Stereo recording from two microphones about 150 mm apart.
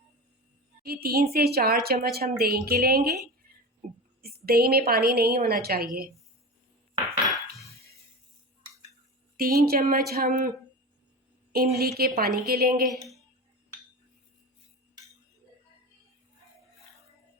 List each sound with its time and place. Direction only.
1.0 s a woman's voice: 90° right
3.8 s speech: 55° right (ahead or behind)
4.2 s a woman's voice: 90° right
9.4 s a woman's voice: 90° right
10.2 s speech: 65° right (ahead or behind)
11.5 s a woman's voice: 90° right